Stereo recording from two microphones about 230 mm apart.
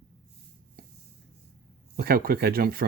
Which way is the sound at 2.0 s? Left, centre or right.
Right.